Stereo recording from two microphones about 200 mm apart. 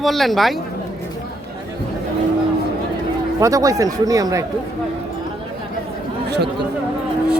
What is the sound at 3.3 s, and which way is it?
Speech, 15° right (ahead or behind).